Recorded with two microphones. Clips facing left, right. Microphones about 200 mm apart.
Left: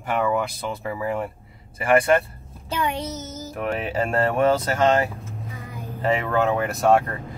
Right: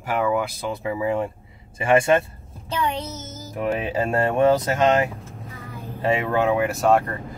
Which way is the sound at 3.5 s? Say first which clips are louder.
Right 2 dB; 15° right (ahead or behind).